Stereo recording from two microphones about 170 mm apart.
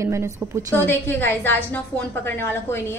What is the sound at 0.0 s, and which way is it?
Speech, 15° right (ahead or behind).